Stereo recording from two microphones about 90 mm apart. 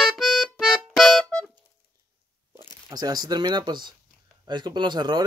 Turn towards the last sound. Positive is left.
turn(degrees=-55)  # may be behind; listen again after turning